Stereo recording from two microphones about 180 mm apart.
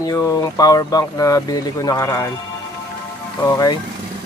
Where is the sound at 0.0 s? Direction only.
20° left (ahead or behind).